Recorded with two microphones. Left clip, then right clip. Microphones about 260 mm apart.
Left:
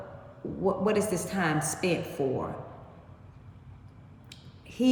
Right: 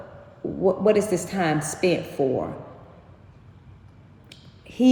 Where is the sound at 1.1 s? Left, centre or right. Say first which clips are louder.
Right 5 dB; centre.